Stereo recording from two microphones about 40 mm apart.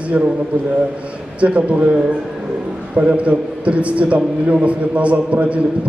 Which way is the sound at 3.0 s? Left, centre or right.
Right.